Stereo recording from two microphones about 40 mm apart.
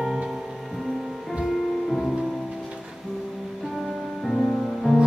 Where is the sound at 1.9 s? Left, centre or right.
Centre.